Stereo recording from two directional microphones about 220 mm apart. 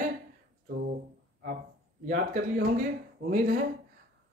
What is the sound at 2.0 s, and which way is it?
Speech, 40° right (ahead or behind).